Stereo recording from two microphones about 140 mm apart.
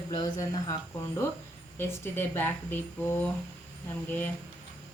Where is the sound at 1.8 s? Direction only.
15° left (ahead or behind).